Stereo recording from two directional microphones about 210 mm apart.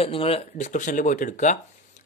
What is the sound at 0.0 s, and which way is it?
Speech, 25° left (ahead or behind).